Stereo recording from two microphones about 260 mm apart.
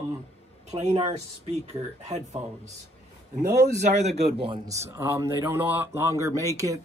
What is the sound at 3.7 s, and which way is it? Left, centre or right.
A man's voice, right.